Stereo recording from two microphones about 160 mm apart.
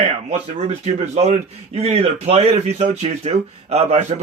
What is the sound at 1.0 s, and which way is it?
Speech, 45° right (ahead or behind).